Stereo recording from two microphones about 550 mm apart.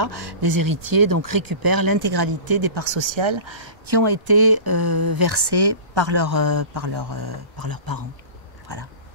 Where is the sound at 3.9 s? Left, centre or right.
Right.